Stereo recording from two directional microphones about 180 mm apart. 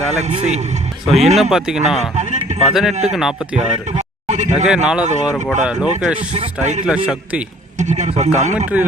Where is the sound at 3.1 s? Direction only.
Centre (ahead or behind).